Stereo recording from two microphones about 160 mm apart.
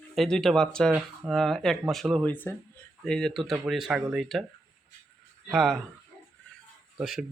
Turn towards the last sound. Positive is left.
turn(degrees=-5)  # may be behind; listen again after turning